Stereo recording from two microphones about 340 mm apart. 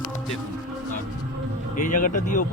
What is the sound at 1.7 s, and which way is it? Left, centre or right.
Speech, left.